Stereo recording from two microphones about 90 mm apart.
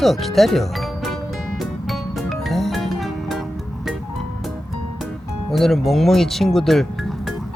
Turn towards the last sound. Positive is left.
turn(degrees=0)  # may be behind; listen again after turning